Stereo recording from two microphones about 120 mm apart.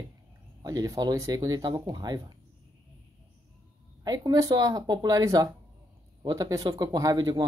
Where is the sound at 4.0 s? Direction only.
30° right (ahead or behind).